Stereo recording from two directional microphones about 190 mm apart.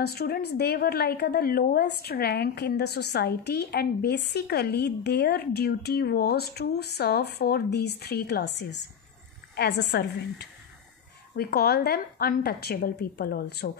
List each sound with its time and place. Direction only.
0.0 s a woman's voice: 55° left (ahead or behind)